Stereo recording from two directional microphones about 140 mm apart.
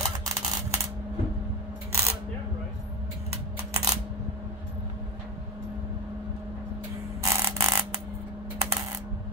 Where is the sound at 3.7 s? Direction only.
25° right (ahead or behind).